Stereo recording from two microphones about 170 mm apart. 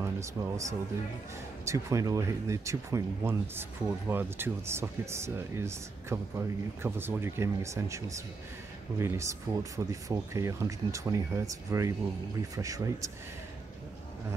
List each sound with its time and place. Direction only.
0.0 s speech: 15° right (ahead or behind)